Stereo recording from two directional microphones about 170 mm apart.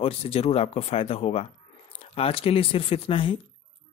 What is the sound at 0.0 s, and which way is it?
Speech, 35° left (ahead or behind).